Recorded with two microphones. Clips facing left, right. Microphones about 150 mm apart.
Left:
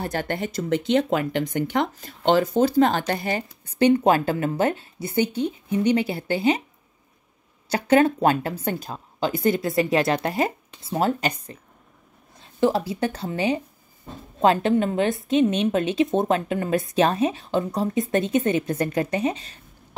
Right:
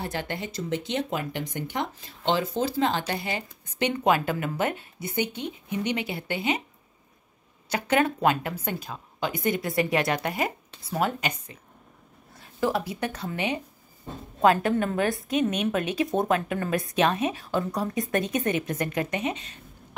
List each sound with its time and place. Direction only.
0.0 s speech: 45° left (ahead or behind)
7.7 s a woman's voice: 30° left (ahead or behind)